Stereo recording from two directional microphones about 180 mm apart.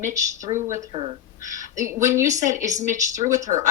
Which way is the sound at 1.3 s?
45° left (ahead or behind).